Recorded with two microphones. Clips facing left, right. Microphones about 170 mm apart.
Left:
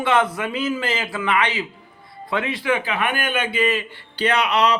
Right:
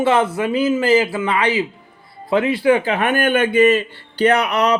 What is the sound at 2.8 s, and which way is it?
Speech, 45° right (ahead or behind).